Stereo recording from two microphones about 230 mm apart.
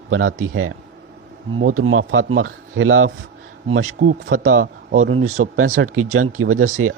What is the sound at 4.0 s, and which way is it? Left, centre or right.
Speech, right.